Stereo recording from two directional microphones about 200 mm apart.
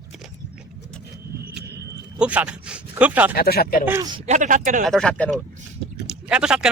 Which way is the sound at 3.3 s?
50° left (ahead or behind).